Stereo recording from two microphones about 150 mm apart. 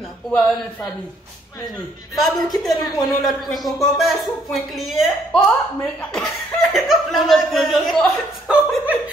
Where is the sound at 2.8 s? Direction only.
25° left (ahead or behind).